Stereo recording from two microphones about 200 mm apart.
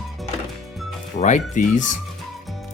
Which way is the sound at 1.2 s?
40° left (ahead or behind).